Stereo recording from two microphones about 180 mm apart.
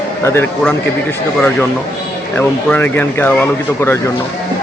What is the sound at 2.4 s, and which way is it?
Speech, 10° left (ahead or behind).